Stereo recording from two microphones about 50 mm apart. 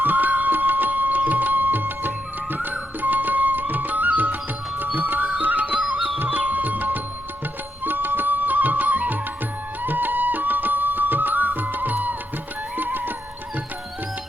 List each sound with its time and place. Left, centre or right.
0.0 s music: right